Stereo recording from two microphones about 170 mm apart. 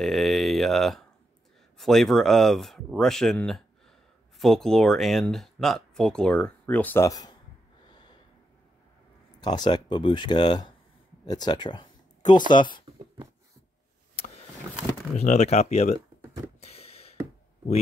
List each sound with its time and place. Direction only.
0.0 s a sound: centre (ahead or behind)
1.8 s speech: centre (ahead or behind); by 7.3 s 20° left (ahead or behind)
7.9 s snort: 25° left (ahead or behind)
9.4 s speech: 25° left (ahead or behind)
15.1 s speech: 40° left (ahead or behind)
16.6 s a sound: 35° left (ahead or behind)